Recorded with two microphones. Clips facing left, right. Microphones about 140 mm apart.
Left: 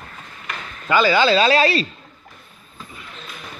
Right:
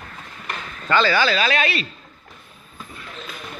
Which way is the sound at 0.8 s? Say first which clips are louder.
Left 3 dB; 15° left (ahead or behind).